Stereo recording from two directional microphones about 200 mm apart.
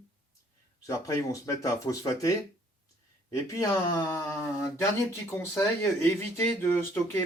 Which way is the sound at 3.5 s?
15° left (ahead or behind).